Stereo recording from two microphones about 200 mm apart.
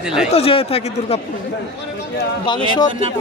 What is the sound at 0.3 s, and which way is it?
Speech, 30° left (ahead or behind).